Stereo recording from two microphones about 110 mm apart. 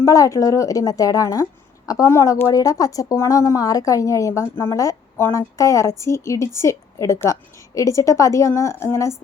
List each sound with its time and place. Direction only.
0.0 s a woman's voice: 30° left (ahead or behind)